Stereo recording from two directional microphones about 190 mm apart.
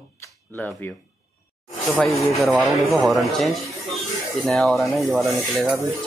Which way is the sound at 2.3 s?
Centre (ahead or behind).